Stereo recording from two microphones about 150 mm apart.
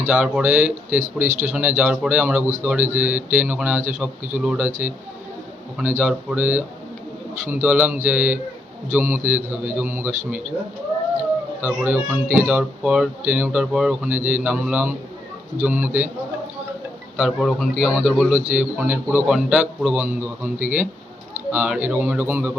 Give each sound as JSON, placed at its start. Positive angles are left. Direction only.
{"t": 0.1, "sound": "speech", "side_deg": -10}
{"t": 1.3, "sound": "speech", "side_deg": -50}
{"t": 1.5, "sound": "speech", "side_deg": -10}
{"t": 6.0, "sound": "speech", "side_deg": -10}
{"t": 11.6, "sound": "speech", "side_deg": -10}
{"t": 17.2, "sound": "a man's voice", "side_deg": 0}